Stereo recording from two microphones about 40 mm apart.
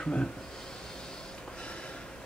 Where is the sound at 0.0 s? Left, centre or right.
Left.